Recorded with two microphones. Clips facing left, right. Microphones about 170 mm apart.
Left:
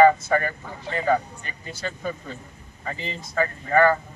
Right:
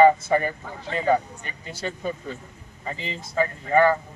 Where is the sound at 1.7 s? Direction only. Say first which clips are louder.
Right 1 dB; 25° right (ahead or behind).